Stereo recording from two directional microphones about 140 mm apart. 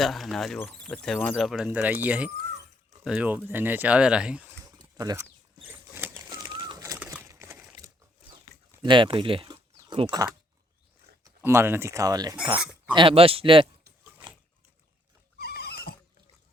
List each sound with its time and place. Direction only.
0.0 s speech: centre (ahead or behind)
4.8 s a sound: 25° right (ahead or behind)
6.0 s bird flight: 25° right (ahead or behind)
7.0 s a sound: 10° right (ahead or behind)
8.8 s speech: 35° right (ahead or behind)
11.2 s speech: 15° right (ahead or behind)
12.9 s speech: 35° right (ahead or behind)
15.4 s neigh: 90° left